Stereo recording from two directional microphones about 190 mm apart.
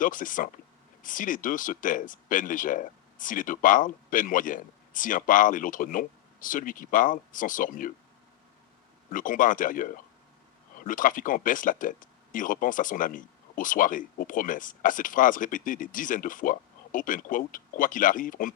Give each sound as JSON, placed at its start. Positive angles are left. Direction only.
{"t": 0.0, "sound": "speech", "side_deg": 45}
{"t": 9.0, "sound": "speech", "side_deg": 45}